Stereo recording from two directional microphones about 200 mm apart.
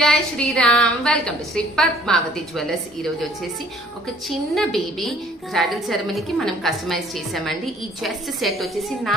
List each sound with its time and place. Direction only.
0.0 s a woman's voice: 5° left (ahead or behind)
4.3 s a woman's voice: centre (ahead or behind)